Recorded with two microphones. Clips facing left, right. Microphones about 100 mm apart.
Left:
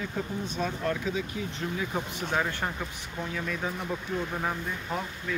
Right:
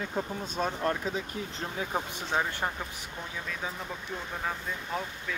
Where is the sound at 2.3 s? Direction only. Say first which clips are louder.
Even; 10° right (ahead or behind).